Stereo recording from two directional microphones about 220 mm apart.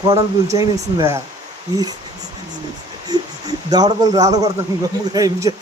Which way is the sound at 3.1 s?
15° right (ahead or behind).